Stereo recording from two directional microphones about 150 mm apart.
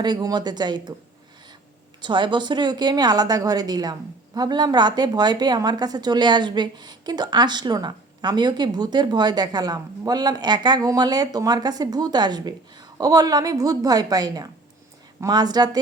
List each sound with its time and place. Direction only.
0.0 s a woman's voice: 25° right (ahead or behind)
2.0 s a woman's voice: 30° right (ahead or behind)